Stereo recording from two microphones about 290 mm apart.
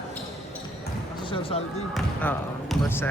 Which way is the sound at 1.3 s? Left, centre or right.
Centre.